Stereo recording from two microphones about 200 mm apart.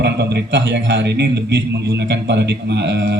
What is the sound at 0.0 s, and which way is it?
A man's voice, 55° right (ahead or behind).